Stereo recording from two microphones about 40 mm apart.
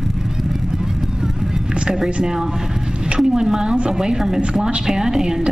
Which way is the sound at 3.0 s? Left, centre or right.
Centre.